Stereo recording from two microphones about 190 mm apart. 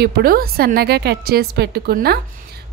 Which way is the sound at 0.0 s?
50° right (ahead or behind).